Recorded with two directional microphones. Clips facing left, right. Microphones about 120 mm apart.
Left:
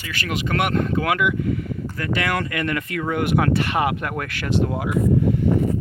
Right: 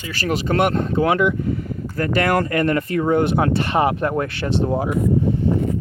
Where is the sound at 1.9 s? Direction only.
40° right (ahead or behind).